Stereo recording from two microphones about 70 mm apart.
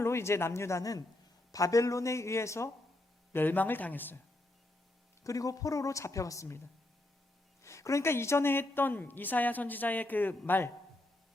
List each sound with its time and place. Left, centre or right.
0.0 s a woman's voice: left
3.3 s a woman's voice: left
5.2 s a woman's voice: left
7.6 s a woman's voice: left